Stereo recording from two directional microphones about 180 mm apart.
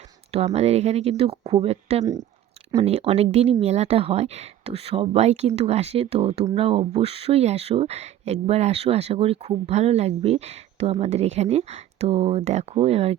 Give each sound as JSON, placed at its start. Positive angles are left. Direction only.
{"t": 0.3, "sound": "speech", "side_deg": -35}